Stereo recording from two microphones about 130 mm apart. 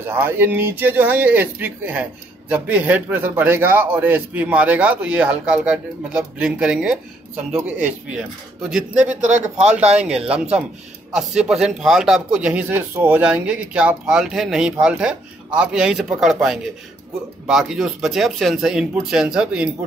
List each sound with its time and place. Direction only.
0.0 s a man's voice: 15° right (ahead or behind)
9.1 s a man's voice: 70° right (ahead or behind)
9.6 s a man's voice: 10° right (ahead or behind)